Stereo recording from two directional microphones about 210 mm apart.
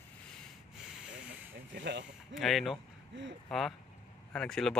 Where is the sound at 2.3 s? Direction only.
Centre (ahead or behind).